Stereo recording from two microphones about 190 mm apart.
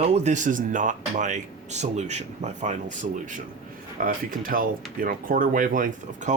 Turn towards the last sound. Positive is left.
turn(degrees=-40)  # may be behind; listen again after turning